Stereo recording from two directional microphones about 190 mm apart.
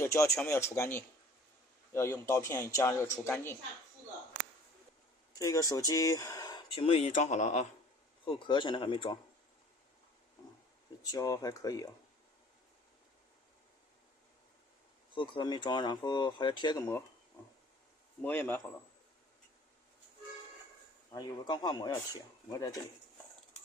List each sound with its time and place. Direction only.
0.0 s a man's voice: 15° left (ahead or behind)
5.3 s speech: 15° left (ahead or behind); by 7.7 s 35° left (ahead or behind)
8.2 s speech: 25° left (ahead or behind)
11.0 s speech: 20° left (ahead or behind)
15.1 s speech: 25° left (ahead or behind)
18.2 s a man's voice: 10° left (ahead or behind)
21.1 s speech: 20° left (ahead or behind)